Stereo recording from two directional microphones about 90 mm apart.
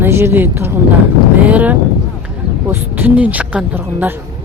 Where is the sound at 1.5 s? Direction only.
15° right (ahead or behind).